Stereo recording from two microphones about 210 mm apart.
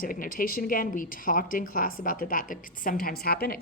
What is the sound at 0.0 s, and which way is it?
A woman's voice, 40° left (ahead or behind).